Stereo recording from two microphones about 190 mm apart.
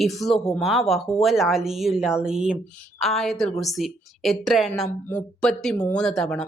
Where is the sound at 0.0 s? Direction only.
Centre (ahead or behind).